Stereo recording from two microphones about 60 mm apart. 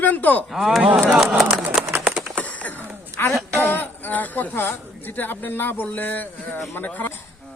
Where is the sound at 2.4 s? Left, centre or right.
Left.